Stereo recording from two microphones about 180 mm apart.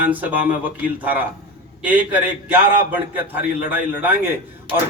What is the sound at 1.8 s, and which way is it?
A man's voice, 10° right (ahead or behind).